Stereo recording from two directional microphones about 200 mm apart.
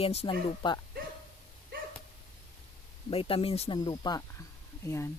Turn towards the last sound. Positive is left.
turn(degrees=15)  # may be behind; listen again after turning